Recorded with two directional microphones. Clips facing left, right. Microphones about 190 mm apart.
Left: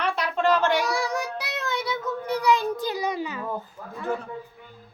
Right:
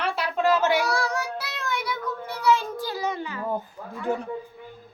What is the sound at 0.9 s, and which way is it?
Child singing, 15° left (ahead or behind).